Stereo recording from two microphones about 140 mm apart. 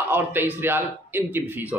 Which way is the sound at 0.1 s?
15° right (ahead or behind).